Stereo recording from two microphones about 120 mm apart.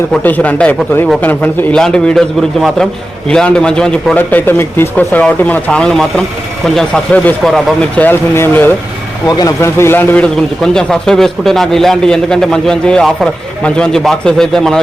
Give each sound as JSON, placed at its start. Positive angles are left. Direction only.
{"t": 0.2, "sound": "a man's voice", "side_deg": 15}
{"t": 9.2, "sound": "speech", "side_deg": 35}
{"t": 9.6, "sound": "a man's voice", "side_deg": 20}
{"t": 10.6, "sound": "a man's voice", "side_deg": 5}